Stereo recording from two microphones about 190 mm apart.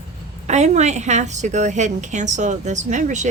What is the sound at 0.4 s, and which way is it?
A woman's voice, 35° right (ahead or behind).